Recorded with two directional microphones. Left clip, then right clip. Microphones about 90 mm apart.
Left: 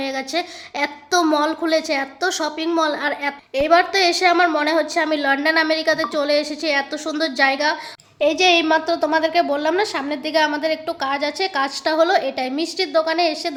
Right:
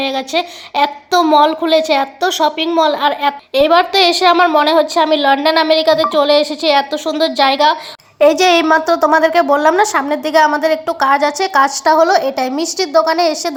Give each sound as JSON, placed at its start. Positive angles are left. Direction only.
{"t": 0.0, "sound": "a woman's voice", "side_deg": -30}
{"t": 3.5, "sound": "a child's voice", "side_deg": -50}
{"t": 8.2, "sound": "a woman's voice", "side_deg": -55}